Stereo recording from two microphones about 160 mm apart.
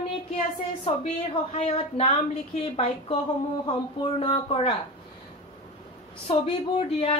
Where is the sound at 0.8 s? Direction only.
40° left (ahead or behind).